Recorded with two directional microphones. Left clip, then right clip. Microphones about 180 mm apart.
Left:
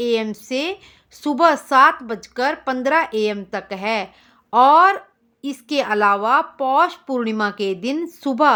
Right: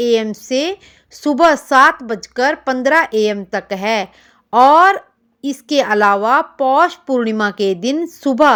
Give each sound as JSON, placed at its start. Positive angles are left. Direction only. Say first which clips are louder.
{"t": 0.0, "sound": "a woman's voice", "louder": "right 5 dB", "side_deg": -20}